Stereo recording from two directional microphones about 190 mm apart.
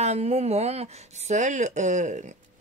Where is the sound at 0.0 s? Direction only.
35° right (ahead or behind).